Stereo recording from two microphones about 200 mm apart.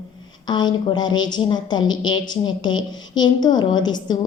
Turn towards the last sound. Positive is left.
turn(degrees=20)  # may be behind; listen again after turning